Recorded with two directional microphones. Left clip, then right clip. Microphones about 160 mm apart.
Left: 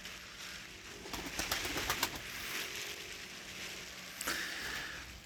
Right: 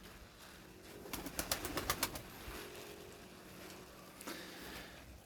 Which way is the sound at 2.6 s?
50° right (ahead or behind).